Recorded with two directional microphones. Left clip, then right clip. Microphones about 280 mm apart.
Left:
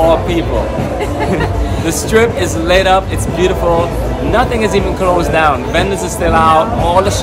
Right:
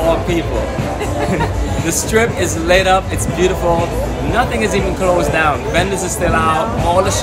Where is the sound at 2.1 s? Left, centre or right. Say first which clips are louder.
Left 4 dB; centre.